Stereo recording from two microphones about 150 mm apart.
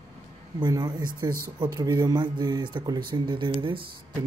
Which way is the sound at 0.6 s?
25° right (ahead or behind).